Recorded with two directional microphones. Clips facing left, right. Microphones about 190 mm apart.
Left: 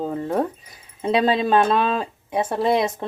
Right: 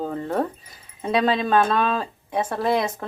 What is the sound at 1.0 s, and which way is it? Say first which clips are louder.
Speech: left 2 dB; 25° left (ahead or behind).